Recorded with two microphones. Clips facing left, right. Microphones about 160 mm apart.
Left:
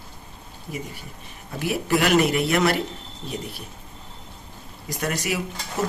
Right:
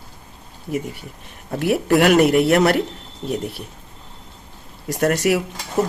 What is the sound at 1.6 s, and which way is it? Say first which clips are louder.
Speech: right 6 dB; 60° right (ahead or behind).